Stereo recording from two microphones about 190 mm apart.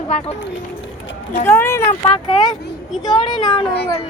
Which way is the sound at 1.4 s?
10° left (ahead or behind).